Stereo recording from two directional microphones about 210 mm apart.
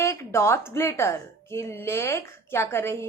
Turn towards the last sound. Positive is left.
turn(degrees=10)  # may be behind; listen again after turning